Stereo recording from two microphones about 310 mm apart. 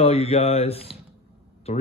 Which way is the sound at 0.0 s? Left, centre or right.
Centre.